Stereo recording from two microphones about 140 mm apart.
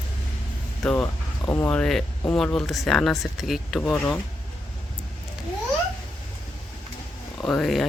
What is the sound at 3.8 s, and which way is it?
Speech, 10° left (ahead or behind).